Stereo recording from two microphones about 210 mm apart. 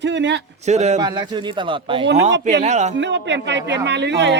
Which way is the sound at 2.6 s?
35° right (ahead or behind).